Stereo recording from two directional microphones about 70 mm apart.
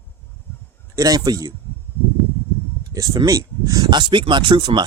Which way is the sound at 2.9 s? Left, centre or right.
Right.